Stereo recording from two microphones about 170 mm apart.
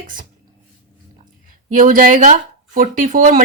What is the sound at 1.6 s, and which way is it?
Speech, 50° right (ahead or behind).